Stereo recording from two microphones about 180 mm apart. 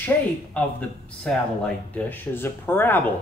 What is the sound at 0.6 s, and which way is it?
Speech, 5° left (ahead or behind).